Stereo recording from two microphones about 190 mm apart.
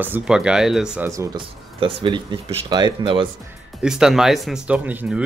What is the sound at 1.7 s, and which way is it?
Speech, 25° right (ahead or behind).